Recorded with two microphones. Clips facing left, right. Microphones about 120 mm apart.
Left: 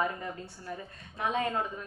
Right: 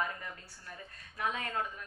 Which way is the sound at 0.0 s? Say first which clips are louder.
Left 6 dB; 25° left (ahead or behind).